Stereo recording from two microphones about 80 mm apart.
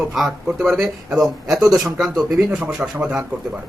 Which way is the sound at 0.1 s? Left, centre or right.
Centre.